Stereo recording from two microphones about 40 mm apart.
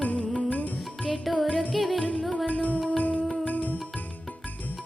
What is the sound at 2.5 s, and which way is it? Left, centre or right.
Music, left.